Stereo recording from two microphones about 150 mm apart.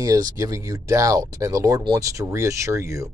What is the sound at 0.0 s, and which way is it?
Speech, 20° right (ahead or behind).